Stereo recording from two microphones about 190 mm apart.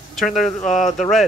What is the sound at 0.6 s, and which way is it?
Speech, 40° left (ahead or behind).